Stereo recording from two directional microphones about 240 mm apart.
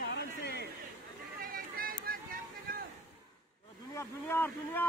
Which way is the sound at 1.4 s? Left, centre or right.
Right.